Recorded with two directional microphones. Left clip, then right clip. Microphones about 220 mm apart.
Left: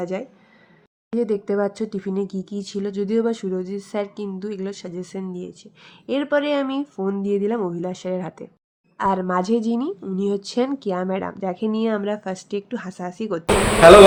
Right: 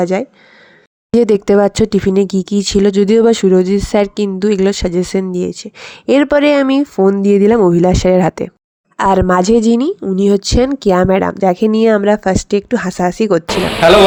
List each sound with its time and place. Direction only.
0.0 s a woman's voice: 35° right (ahead or behind)